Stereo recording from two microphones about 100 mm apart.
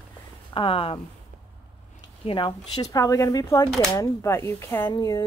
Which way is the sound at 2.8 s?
35° left (ahead or behind).